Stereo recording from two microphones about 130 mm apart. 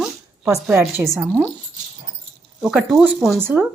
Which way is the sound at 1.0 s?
5° left (ahead or behind).